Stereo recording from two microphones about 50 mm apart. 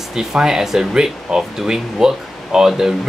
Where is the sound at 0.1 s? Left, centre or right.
Centre.